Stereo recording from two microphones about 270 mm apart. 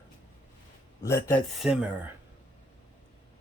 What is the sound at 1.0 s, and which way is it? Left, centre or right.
Speech, centre.